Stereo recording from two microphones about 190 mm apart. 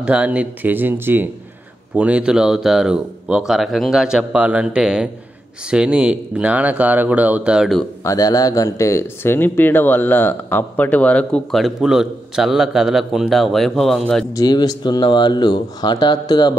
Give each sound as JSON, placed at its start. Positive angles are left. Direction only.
{"t": 0.0, "sound": "speech", "side_deg": -5}
{"t": 8.0, "sound": "speech", "side_deg": 15}
{"t": 14.3, "sound": "speech", "side_deg": 20}